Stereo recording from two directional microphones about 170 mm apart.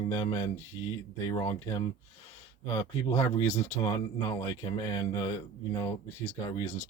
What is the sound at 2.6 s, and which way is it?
Speech, 20° left (ahead or behind).